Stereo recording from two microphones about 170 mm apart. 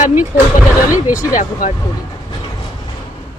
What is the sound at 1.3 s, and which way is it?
Speech, 50° left (ahead or behind).